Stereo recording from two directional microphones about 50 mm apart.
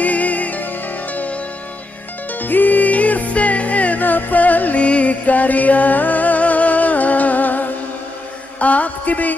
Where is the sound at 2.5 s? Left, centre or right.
Left.